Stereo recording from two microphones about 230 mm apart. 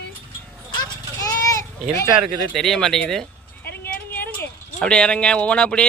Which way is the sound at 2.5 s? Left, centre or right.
Centre.